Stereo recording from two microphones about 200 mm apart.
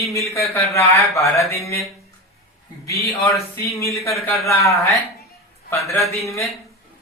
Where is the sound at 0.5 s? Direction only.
15° left (ahead or behind).